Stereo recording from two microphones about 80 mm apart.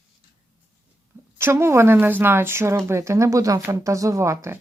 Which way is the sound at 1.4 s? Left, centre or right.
Right.